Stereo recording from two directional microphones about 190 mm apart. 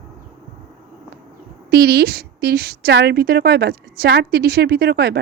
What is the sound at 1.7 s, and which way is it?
A woman's voice, 55° right (ahead or behind).